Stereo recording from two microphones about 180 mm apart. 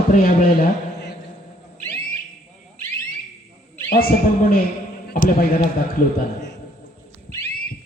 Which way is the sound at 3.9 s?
55° left (ahead or behind).